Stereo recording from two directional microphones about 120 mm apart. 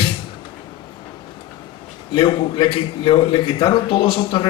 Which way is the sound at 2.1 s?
45° left (ahead or behind).